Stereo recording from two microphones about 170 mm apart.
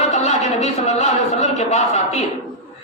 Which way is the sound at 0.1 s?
40° left (ahead or behind).